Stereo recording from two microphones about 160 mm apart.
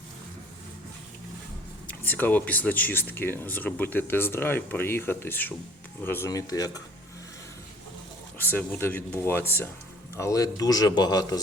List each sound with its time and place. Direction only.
1.9 s speech: 10° left (ahead or behind)
8.4 s speech: 10° left (ahead or behind)